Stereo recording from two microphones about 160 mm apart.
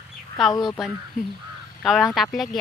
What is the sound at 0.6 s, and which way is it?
Speech, centre (ahead or behind).